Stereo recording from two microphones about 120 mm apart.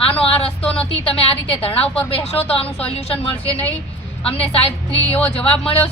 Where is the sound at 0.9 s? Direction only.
55° left (ahead or behind).